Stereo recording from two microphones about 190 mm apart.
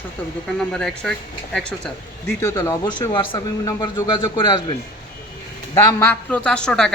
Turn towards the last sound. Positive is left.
turn(degrees=5)  # may be behind; listen again after turning